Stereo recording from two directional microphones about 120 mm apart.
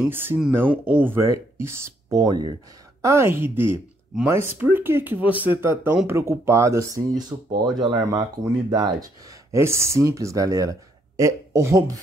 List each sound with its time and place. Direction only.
0.1 s speech: 20° right (ahead or behind)